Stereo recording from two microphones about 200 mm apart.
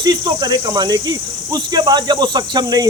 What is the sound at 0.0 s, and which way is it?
Speech, 20° right (ahead or behind).